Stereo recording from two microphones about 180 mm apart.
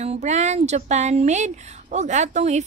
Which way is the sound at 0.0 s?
40° right (ahead or behind).